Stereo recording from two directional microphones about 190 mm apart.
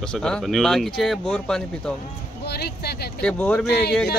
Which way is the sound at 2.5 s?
55° left (ahead or behind).